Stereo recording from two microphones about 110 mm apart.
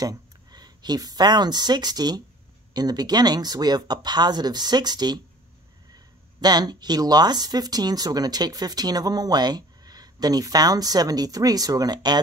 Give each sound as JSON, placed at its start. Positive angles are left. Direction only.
{"t": 0.0, "sound": "speech", "side_deg": -35}
{"t": 6.4, "sound": "speech", "side_deg": -40}